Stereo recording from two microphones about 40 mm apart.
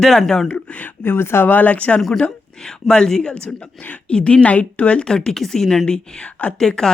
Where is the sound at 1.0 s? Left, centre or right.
Left.